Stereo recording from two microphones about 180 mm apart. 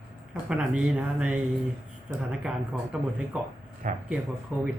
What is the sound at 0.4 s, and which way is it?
Speech, 5° right (ahead or behind).